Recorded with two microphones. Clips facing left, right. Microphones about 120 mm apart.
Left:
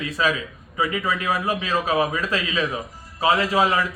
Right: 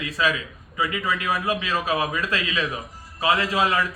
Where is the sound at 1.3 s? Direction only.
30° left (ahead or behind).